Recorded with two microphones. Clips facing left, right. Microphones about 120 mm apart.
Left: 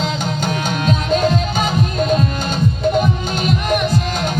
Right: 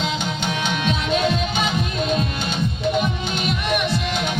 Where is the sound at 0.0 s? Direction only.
40° left (ahead or behind).